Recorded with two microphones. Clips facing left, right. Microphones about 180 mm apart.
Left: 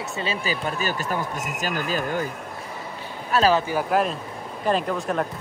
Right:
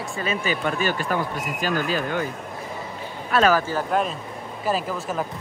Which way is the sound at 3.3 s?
30° left (ahead or behind).